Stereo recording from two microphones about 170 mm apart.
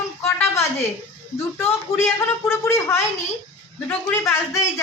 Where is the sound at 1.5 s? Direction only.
15° left (ahead or behind).